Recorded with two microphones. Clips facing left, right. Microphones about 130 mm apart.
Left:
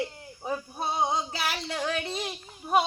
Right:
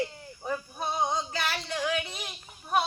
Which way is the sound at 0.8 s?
30° left (ahead or behind).